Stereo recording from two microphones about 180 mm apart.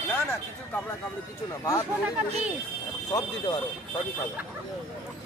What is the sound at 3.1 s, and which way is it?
Speech, 25° left (ahead or behind).